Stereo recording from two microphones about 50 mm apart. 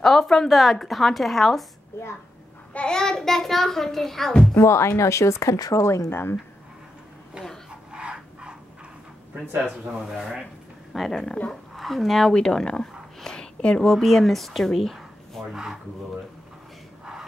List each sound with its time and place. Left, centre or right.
0.0 s a woman's voice: centre
2.9 s a child's voice: centre
4.6 s speech: left
6.0 s speech: left
7.9 s a sound: centre
9.6 s a woman's voice: centre
10.9 s a woman's voice: centre
12.4 s a sound: centre
13.7 s speech: centre
15.5 s speech: centre